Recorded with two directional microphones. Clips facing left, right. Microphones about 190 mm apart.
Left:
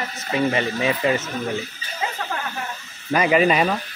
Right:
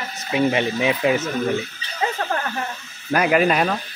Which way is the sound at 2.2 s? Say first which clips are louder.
Right 4 dB; 50° right (ahead or behind).